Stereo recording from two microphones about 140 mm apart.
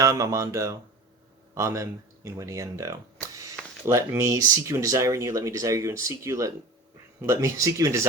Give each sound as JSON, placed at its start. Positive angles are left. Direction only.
{"t": 0.0, "sound": "speech", "side_deg": -25}